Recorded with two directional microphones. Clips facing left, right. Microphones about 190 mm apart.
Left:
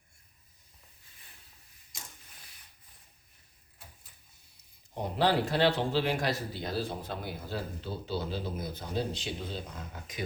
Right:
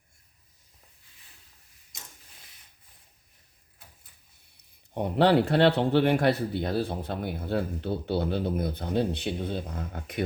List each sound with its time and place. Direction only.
4.5 s speech: 60° right (ahead or behind)